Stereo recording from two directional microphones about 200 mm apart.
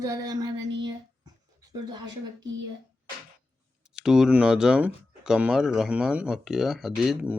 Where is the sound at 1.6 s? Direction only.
20° right (ahead or behind).